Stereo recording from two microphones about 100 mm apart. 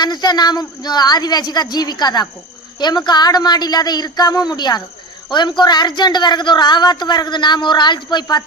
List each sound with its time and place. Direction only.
0.0 s a woman's voice: 45° left (ahead or behind)